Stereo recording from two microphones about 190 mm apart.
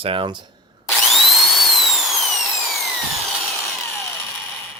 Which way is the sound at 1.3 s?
Centre (ahead or behind).